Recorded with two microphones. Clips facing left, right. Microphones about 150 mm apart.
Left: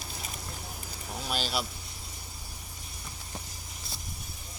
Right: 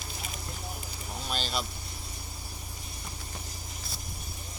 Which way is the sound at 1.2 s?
5° left (ahead or behind).